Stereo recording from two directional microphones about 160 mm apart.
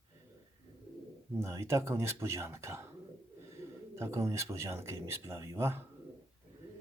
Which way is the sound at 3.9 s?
15° right (ahead or behind).